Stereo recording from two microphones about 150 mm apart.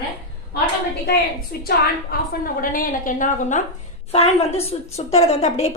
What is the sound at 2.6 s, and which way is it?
A woman's voice, 70° left (ahead or behind).